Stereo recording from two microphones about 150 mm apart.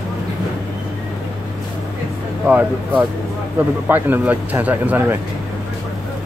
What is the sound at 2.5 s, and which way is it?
Speech, 10° right (ahead or behind).